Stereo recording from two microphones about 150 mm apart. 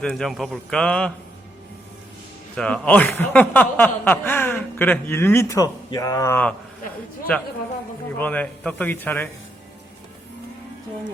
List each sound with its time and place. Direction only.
0.0 s a man's voice: 5° left (ahead or behind)
2.6 s speech: 5° left (ahead or behind)